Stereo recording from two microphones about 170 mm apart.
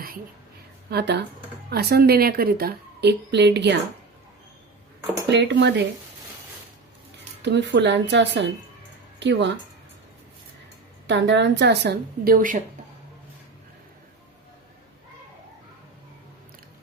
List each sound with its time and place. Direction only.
0.9 s a woman's voice: 75° right (ahead or behind)
5.3 s speech: 90° right
7.4 s speech: 90° right
11.0 s a woman's voice: 90° right; by 12.5 s 55° right (ahead or behind)